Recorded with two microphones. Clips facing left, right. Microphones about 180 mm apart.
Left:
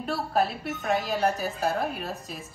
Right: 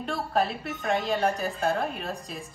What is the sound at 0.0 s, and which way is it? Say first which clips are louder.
A woman's voice: left 1 dB; 5° left (ahead or behind).